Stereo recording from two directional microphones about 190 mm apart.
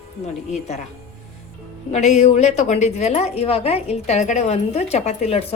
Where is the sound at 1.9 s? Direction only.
40° left (ahead or behind).